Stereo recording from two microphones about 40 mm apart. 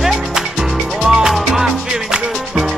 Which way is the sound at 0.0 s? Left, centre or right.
Centre.